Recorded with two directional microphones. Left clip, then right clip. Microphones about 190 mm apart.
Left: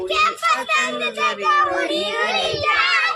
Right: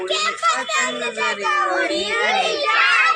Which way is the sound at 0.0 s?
15° right (ahead or behind).